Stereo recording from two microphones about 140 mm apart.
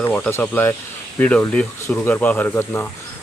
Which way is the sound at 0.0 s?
15° left (ahead or behind).